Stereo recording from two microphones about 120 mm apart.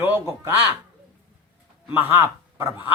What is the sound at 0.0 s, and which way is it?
Speech, 20° right (ahead or behind).